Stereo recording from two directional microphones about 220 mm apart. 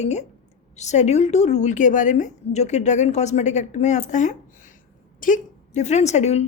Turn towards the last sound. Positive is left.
turn(degrees=30)  # may be behind; listen again after turning